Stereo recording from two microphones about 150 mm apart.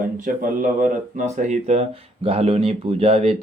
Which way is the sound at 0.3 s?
65° right (ahead or behind).